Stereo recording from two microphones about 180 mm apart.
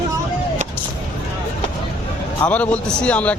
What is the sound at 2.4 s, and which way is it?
Speech, 5° left (ahead or behind).